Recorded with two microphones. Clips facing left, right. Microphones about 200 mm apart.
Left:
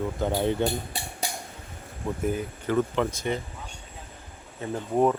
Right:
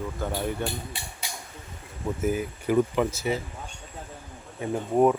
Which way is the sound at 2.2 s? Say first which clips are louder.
Right 2 dB; 5° right (ahead or behind).